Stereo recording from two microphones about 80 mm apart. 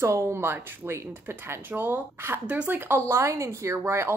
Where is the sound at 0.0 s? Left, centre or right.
Right.